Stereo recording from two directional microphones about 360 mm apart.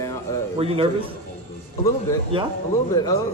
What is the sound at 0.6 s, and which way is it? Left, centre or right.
Speech, centre.